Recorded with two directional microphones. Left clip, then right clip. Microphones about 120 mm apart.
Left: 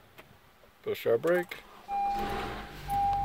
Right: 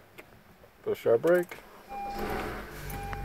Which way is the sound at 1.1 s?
25° left (ahead or behind).